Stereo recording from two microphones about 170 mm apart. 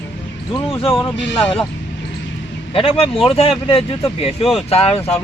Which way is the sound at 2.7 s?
35° left (ahead or behind).